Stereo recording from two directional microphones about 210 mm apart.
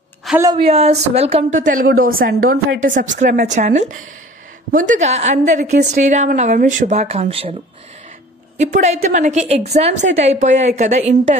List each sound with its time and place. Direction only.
0.3 s a sound: centre (ahead or behind)
0.6 s speech: 30° right (ahead or behind)
8.5 s speech: 35° right (ahead or behind)